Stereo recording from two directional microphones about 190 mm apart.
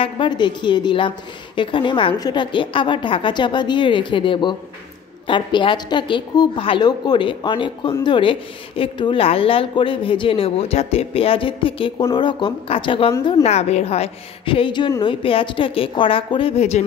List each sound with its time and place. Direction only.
0.0 s a woman's voice: 25° left (ahead or behind)